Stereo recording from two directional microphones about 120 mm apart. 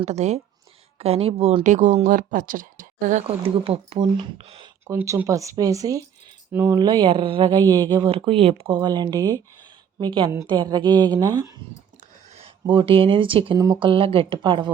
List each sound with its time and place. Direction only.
0.0 s speech: 65° right (ahead or behind)
0.9 s speech: 55° right (ahead or behind)
1.6 s speech: 85° right
3.2 s speech: 50° right (ahead or behind)
5.0 s speech: 25° right (ahead or behind)
6.7 s speech: 40° right (ahead or behind)
12.6 s speech: 45° right (ahead or behind)